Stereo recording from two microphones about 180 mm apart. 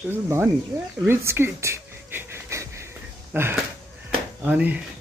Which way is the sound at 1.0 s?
10° right (ahead or behind).